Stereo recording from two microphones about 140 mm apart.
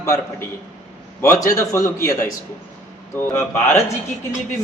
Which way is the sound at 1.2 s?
20° left (ahead or behind).